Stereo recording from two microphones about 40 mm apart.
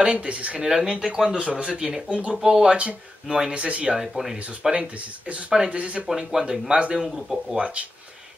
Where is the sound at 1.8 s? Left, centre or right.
Centre.